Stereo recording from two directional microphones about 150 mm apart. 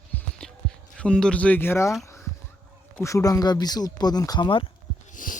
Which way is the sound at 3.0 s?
20° left (ahead or behind).